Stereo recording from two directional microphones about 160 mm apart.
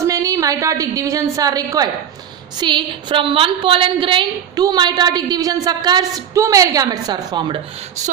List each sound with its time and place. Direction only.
0.0 s a woman's voice: 20° right (ahead or behind)